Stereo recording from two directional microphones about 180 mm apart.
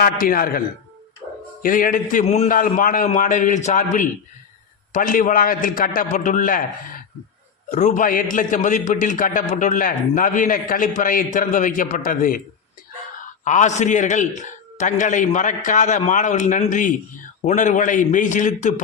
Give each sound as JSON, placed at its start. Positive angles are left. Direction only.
{"t": 0.0, "sound": "a man's voice", "side_deg": 55}
{"t": 1.6, "sound": "a man's voice", "side_deg": 50}
{"t": 13.4, "sound": "a man's voice", "side_deg": 45}